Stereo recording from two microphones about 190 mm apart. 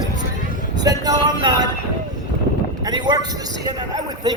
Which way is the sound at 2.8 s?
25° right (ahead or behind).